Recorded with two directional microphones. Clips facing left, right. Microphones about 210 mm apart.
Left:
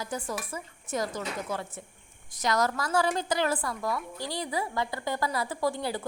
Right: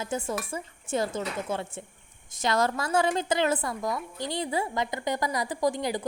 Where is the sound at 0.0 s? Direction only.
25° right (ahead or behind).